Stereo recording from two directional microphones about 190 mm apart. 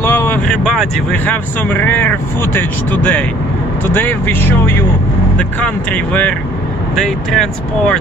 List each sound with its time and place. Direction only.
0.0 s vehicle: 10° left (ahead or behind)
0.7 s speech: 5° left (ahead or behind)